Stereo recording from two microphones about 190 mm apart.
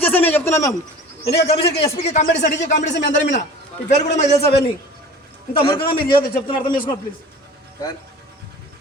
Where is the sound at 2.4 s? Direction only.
40° left (ahead or behind).